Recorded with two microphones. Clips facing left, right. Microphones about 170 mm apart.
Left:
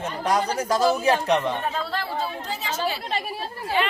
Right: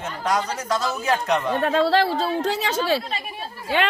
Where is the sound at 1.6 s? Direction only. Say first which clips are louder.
Right 9 dB; 80° right.